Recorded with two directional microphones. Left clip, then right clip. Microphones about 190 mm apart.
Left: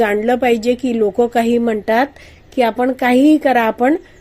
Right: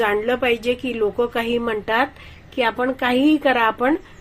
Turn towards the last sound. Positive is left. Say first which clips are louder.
# left 4 dB
turn(degrees=50)  # may be behind; listen again after turning